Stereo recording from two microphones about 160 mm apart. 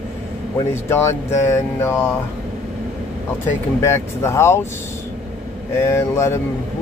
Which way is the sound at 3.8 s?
15° left (ahead or behind).